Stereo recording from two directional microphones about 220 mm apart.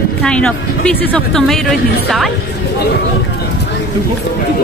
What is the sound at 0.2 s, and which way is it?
Speech, 5° left (ahead or behind).